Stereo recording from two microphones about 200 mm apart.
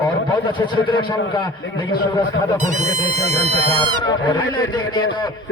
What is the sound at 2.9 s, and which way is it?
Speech, 90° left.